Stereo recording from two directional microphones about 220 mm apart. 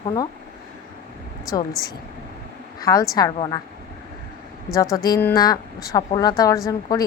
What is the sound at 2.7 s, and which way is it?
Speech, 15° left (ahead or behind).